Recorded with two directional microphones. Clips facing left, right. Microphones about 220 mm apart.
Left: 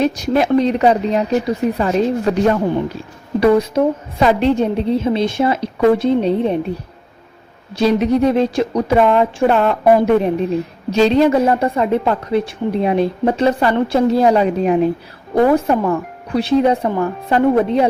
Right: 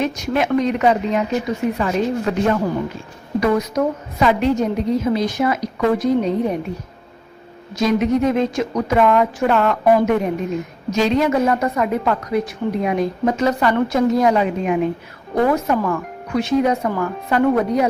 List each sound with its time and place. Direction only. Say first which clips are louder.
0.0 s a woman's voice: left 4 dB; 35° left (ahead or behind)
7.8 s a woman's voice: left 3 dB; 35° left (ahead or behind)